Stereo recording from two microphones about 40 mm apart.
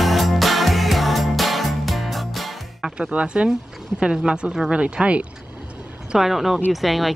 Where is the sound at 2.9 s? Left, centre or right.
Right.